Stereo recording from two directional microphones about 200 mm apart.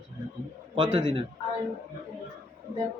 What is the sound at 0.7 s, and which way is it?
Speech, 35° right (ahead or behind).